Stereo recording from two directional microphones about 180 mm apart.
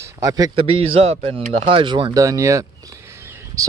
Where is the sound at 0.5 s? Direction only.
30° right (ahead or behind).